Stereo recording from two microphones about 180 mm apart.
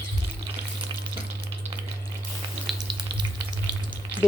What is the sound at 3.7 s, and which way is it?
Frying, 25° right (ahead or behind).